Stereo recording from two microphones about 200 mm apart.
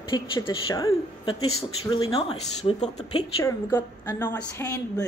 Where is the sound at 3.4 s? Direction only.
15° left (ahead or behind).